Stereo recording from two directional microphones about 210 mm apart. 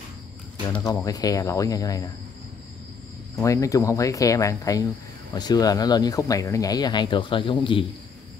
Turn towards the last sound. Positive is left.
turn(degrees=25)  # may be behind; listen again after turning